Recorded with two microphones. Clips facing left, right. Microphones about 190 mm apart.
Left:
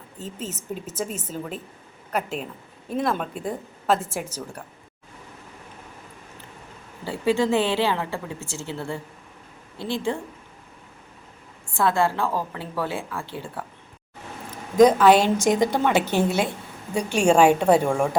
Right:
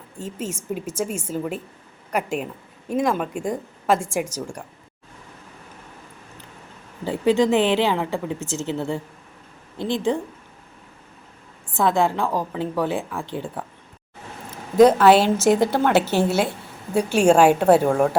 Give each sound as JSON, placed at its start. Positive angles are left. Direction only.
{"t": 0.2, "sound": "a woman's voice", "side_deg": -10}
{"t": 7.0, "sound": "a woman's voice", "side_deg": -15}
{"t": 11.7, "sound": "a woman's voice", "side_deg": -20}
{"t": 14.8, "sound": "a woman's voice", "side_deg": -5}